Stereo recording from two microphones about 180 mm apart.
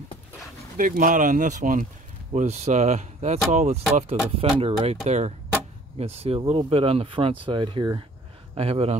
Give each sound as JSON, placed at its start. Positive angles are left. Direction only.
{"t": 0.7, "sound": "speech", "side_deg": -50}